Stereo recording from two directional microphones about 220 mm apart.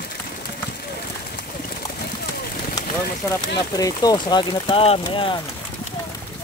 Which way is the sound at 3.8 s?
15° left (ahead or behind).